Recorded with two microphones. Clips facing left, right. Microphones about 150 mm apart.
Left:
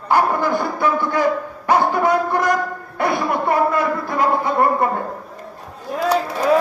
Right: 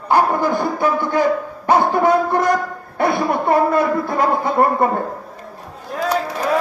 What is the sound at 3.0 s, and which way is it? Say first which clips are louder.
A man's voice: right 2 dB; 30° right (ahead or behind).